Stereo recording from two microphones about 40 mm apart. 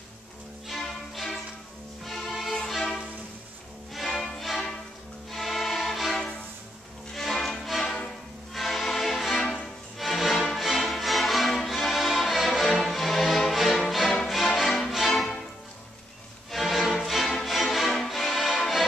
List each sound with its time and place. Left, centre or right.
0.7 s music: centre
7.8 s music: centre
8.5 s music: centre
16.4 s music: centre